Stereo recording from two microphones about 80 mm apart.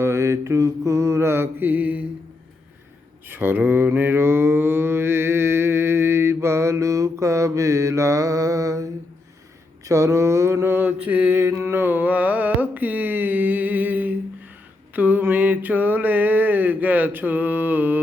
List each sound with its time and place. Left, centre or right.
0.0 s mantra: right; by 2.0 s centre
3.2 s mantra: right
10.8 s mantra: right
11.4 s carnatic music: right
14.9 s a sound: right